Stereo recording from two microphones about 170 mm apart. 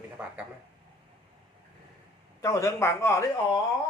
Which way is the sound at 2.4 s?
20° left (ahead or behind).